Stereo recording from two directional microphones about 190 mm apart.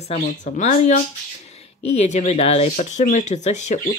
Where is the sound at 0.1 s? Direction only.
40° left (ahead or behind).